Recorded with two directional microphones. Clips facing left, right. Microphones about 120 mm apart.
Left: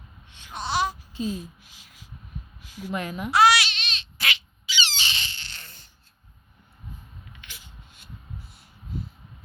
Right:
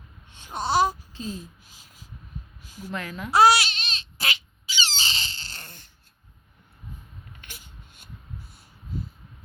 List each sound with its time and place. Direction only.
0.3 s babbling: 40° right (ahead or behind)
1.1 s a child's voice: 10° left (ahead or behind)
1.8 s a sound: 40° right (ahead or behind)
2.9 s speech: 20° left (ahead or behind)
3.3 s squeak: 35° right (ahead or behind)
7.3 s a sound: 45° right (ahead or behind)